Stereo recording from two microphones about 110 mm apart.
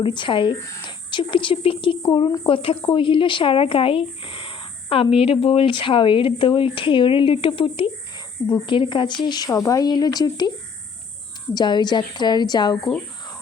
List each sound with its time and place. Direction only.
0.0 s a woman's voice: 45° left (ahead or behind)
9.5 s a woman's voice: 30° left (ahead or behind)
11.5 s a woman's voice: 40° left (ahead or behind)